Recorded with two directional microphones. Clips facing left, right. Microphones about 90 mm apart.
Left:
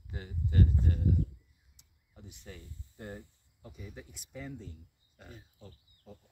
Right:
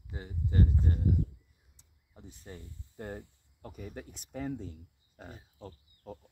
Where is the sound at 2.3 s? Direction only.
35° right (ahead or behind).